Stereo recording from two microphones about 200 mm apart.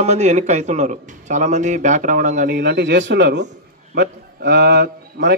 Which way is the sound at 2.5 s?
55° right (ahead or behind).